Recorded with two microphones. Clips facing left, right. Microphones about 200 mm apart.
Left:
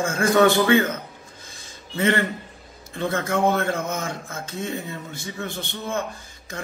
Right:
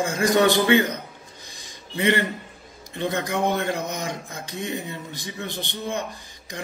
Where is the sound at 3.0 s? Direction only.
15° right (ahead or behind).